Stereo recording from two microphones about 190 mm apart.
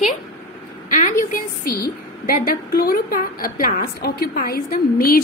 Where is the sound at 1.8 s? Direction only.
50° left (ahead or behind).